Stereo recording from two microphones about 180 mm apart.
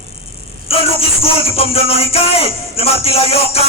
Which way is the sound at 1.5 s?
35° left (ahead or behind).